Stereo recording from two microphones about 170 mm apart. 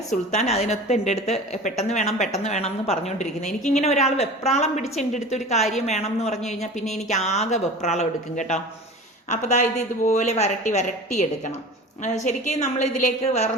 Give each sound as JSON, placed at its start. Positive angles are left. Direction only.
{"t": 0.3, "sound": "a woman's voice", "side_deg": 40}